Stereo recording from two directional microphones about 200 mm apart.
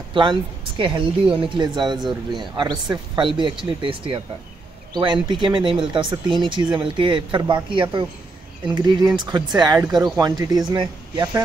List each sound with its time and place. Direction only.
0.1 s speech: 25° right (ahead or behind)